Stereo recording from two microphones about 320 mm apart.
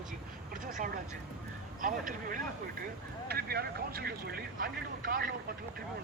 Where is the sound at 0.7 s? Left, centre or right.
Right.